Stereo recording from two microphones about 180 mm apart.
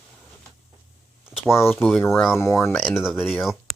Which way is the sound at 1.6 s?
10° left (ahead or behind).